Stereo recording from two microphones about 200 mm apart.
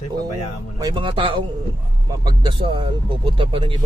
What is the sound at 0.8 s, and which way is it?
Speech, 20° right (ahead or behind).